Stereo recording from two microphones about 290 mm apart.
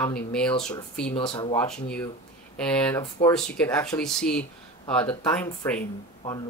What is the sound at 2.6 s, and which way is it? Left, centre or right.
Speech, centre.